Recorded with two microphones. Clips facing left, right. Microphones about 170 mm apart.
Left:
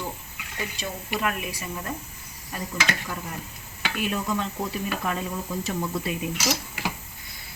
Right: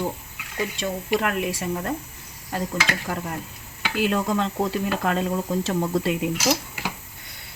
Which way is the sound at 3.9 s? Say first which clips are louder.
Right 5 dB; 90° right.